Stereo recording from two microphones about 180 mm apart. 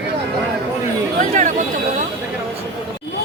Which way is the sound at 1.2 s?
45° right (ahead or behind).